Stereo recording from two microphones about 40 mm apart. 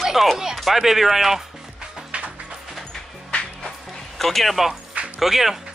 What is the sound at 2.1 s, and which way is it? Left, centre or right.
Music, right.